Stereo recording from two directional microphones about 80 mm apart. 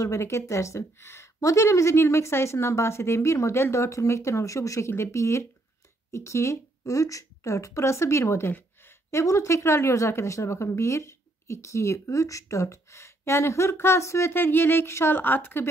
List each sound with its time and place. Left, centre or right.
0.0 s speech: left
8.5 s a sound: left
9.2 s speech: left